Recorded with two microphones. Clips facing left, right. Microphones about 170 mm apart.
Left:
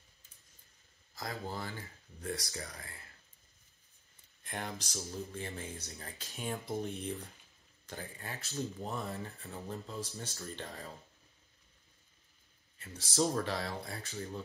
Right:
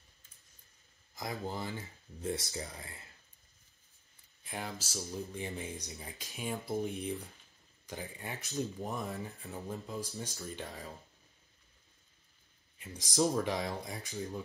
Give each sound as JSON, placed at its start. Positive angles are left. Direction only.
{"t": 1.1, "sound": "speech", "side_deg": -20}
{"t": 4.4, "sound": "speech", "side_deg": -5}
{"t": 5.3, "sound": "speech", "side_deg": -15}
{"t": 12.7, "sound": "speech", "side_deg": -15}